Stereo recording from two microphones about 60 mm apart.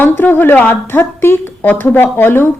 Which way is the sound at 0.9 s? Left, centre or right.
Left.